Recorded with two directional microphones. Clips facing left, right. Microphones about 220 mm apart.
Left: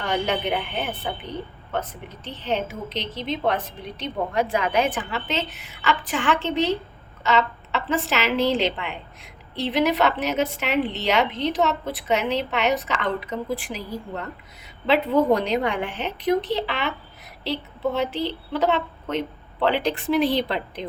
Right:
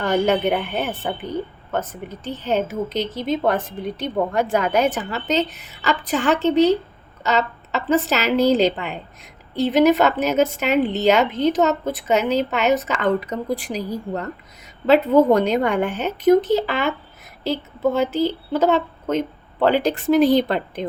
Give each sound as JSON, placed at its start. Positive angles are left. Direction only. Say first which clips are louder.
{"t": 0.0, "sound": "a woman's voice", "louder": "right 6 dB", "side_deg": -45}